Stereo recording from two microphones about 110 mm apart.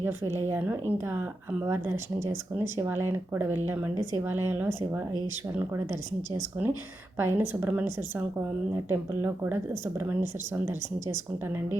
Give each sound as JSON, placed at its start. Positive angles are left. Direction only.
{"t": 0.0, "sound": "a woman's voice", "side_deg": -20}